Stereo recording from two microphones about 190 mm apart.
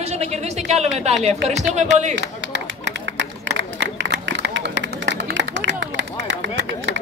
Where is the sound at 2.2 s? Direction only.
70° right (ahead or behind).